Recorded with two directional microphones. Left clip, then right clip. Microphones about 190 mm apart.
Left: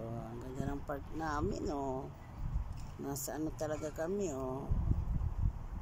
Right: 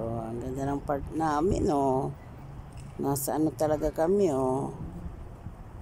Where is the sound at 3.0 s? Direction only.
20° right (ahead or behind).